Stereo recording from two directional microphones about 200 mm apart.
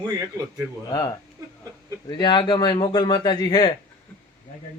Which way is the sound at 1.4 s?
20° right (ahead or behind).